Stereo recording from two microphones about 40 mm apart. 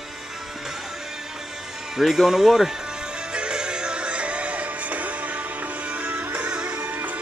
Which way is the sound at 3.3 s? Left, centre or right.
Right.